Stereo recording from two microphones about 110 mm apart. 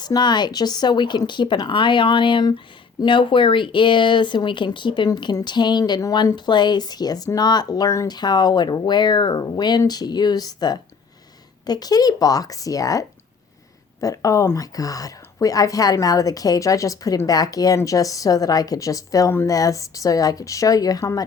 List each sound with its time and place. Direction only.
0.0 s speech: 40° left (ahead or behind)